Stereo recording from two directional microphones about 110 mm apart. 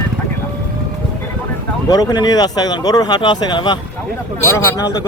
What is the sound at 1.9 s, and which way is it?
Speech, 40° left (ahead or behind).